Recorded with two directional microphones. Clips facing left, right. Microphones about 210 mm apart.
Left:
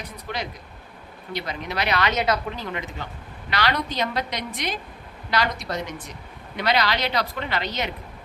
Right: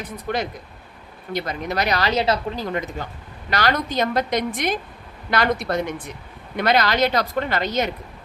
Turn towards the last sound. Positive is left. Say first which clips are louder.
# right 6 dB
turn(degrees=-45)  # may be behind; listen again after turning